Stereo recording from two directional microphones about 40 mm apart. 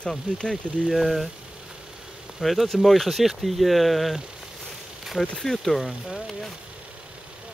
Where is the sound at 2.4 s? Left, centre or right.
Centre.